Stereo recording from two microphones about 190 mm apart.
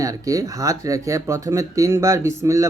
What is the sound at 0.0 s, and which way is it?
Speech, 15° right (ahead or behind).